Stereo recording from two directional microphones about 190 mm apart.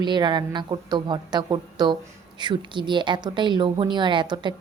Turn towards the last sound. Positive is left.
turn(degrees=-25)  # may be behind; listen again after turning